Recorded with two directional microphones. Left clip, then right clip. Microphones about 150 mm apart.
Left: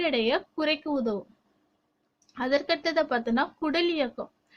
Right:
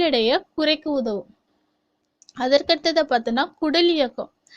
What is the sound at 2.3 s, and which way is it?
A woman's voice, 35° right (ahead or behind).